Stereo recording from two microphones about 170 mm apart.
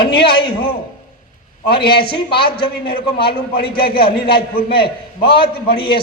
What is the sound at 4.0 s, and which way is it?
Speech, 30° left (ahead or behind).